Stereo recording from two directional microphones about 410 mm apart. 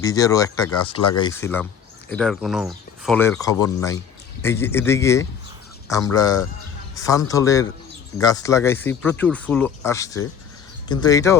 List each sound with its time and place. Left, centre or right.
0.0 s speech: centre